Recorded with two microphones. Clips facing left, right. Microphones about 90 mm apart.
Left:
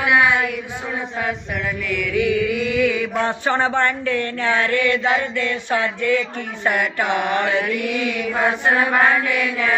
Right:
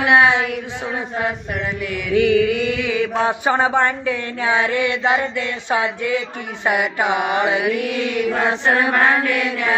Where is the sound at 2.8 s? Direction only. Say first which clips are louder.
Right 2 dB; 20° right (ahead or behind).